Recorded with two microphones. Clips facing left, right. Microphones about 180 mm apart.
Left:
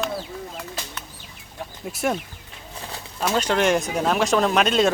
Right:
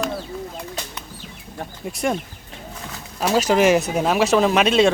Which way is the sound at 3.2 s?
5° right (ahead or behind).